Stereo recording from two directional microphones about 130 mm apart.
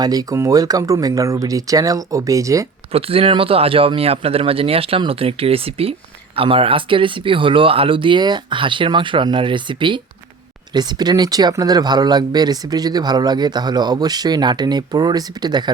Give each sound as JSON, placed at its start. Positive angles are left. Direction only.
{"t": 0.0, "sound": "speech", "side_deg": -30}
{"t": 2.9, "sound": "speech", "side_deg": -45}